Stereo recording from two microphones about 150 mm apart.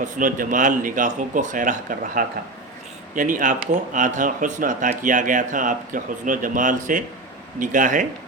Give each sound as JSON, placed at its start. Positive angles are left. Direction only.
{"t": 0.0, "sound": "speech", "side_deg": -65}